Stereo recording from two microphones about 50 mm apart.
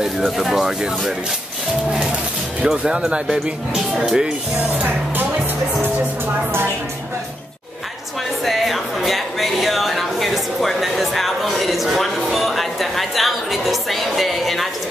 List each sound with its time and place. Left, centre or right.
0.4 s speech: centre
2.6 s speech: centre
4.6 s music: right
8.5 s music: centre